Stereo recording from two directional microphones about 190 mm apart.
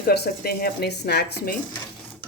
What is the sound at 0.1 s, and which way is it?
A woman's voice, 55° left (ahead or behind).